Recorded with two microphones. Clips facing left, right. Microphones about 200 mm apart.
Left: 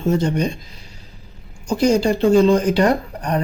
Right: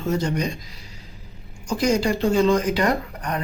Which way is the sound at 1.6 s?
30° left (ahead or behind).